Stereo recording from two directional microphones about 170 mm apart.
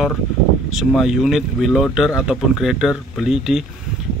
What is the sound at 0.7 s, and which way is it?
Speech, 5° right (ahead or behind).